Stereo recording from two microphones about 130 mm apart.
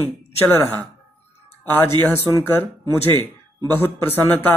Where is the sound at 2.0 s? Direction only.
15° left (ahead or behind).